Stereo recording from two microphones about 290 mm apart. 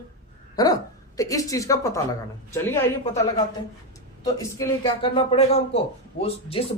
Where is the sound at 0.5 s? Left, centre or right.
Centre.